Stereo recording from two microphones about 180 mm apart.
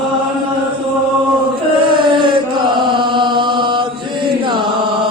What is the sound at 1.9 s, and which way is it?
Chant, 25° right (ahead or behind).